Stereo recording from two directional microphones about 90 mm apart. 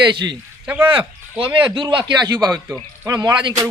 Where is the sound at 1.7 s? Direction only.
65° right (ahead or behind); by 3.3 s 45° right (ahead or behind).